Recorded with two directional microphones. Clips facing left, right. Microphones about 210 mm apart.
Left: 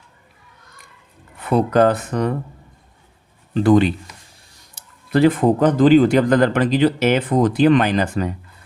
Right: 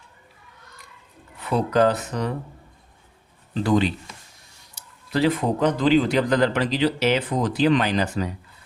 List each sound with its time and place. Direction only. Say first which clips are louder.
1.5 s speech: left 4 dB; 55° left (ahead or behind)
3.5 s speech: left 7 dB; 55° left (ahead or behind)